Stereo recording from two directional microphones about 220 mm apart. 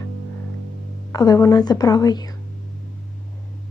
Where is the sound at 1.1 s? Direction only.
15° left (ahead or behind).